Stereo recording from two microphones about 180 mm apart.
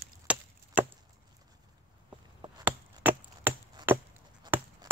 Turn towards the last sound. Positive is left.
turn(degrees=-25)  # may be behind; listen again after turning